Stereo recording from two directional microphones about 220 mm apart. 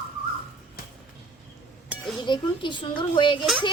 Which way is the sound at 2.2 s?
20° left (ahead or behind).